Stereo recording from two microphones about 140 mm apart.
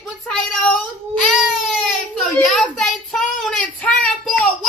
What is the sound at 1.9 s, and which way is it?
Child singing, centre (ahead or behind).